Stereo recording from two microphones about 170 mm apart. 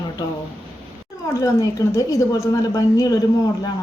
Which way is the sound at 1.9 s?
15° left (ahead or behind).